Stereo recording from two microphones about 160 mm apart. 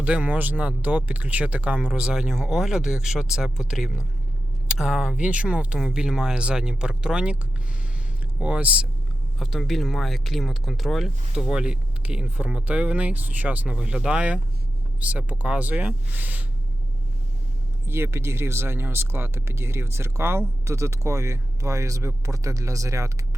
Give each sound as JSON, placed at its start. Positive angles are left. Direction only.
{"t": 0.0, "sound": "speech", "side_deg": -10}
{"t": 8.4, "sound": "speech", "side_deg": -5}
{"t": 17.8, "sound": "speech", "side_deg": -15}